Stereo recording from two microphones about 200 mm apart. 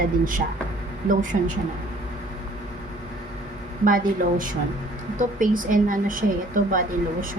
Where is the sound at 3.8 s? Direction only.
45° right (ahead or behind).